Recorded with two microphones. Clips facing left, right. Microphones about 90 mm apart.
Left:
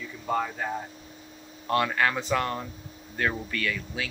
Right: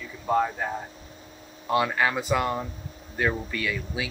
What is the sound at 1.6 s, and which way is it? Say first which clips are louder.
Speech: right 1 dB; 10° right (ahead or behind).